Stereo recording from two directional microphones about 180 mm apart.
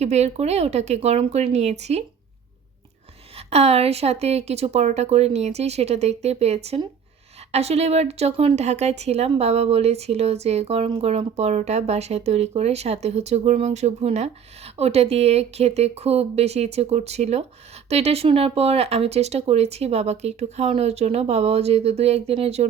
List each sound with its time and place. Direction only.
0.0 s a woman's voice: 35° right (ahead or behind)
3.3 s a woman's voice: 35° right (ahead or behind)